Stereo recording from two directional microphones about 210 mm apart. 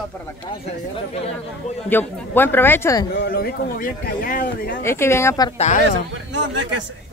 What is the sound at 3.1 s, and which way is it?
A man's voice, 50° left (ahead or behind).